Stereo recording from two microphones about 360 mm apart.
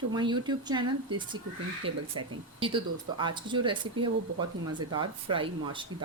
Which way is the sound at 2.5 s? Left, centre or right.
Centre.